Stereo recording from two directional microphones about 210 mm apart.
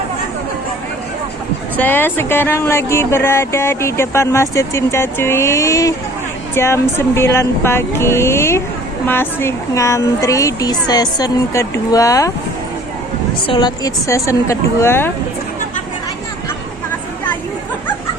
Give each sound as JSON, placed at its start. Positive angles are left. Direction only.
{"t": 1.7, "sound": "speech", "side_deg": 10}
{"t": 13.5, "sound": "speech", "side_deg": 20}